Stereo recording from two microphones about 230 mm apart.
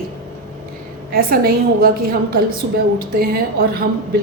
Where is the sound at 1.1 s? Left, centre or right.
Right.